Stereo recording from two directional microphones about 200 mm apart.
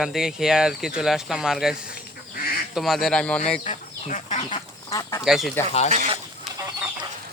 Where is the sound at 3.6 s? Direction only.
35° left (ahead or behind).